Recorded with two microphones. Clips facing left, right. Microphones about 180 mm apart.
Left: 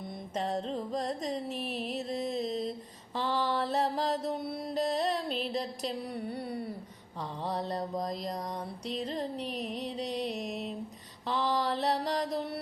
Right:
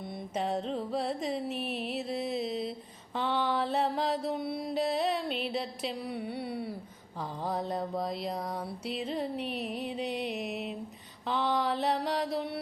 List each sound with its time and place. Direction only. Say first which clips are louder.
0.3 s carnatic music: right 1 dB; centre (ahead or behind)
3.2 s a sound: right 1 dB; centre (ahead or behind)
7.4 s music: right 1 dB; 5° right (ahead or behind)
10.0 s music: left 1 dB; 35° left (ahead or behind)
10.4 s mantra: right 1 dB; 5° right (ahead or behind)
11.3 s music: right 1 dB; centre (ahead or behind)